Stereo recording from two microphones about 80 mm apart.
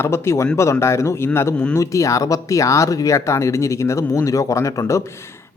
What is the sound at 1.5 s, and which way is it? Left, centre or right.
Speech, centre.